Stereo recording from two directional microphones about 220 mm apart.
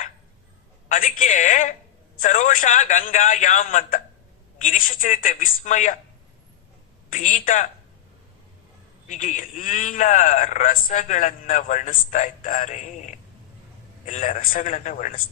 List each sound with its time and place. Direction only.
0.9 s a man's voice: 35° left (ahead or behind)
7.1 s a man's voice: 35° left (ahead or behind)
9.0 s a man's voice: 35° left (ahead or behind)